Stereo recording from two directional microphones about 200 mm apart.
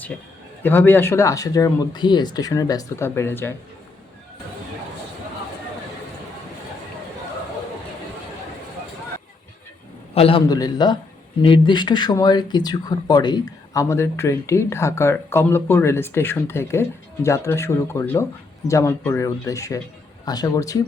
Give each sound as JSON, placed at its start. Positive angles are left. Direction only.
{"t": 0.6, "sound": "speech", "side_deg": 10}
{"t": 10.2, "sound": "a man's voice", "side_deg": 30}